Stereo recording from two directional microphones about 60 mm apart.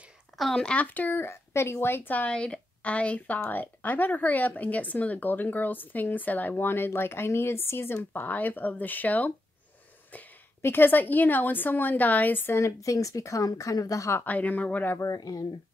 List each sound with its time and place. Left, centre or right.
0.4 s speech: centre
0.8 s speech: left
1.2 s speech: left
2.3 s speech: centre
10.1 s a sound: left
10.6 s speech: left
12.5 s speech: left
14.2 s speech: left
15.0 s speech: left